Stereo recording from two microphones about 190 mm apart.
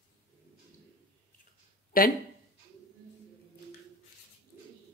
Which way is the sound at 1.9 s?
45° left (ahead or behind).